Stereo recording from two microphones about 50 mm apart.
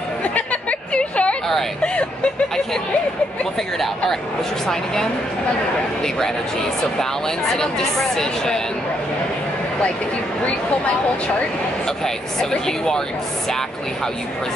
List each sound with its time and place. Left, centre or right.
0.2 s chatter: left
4.6 s speech: centre
12.0 s speech: centre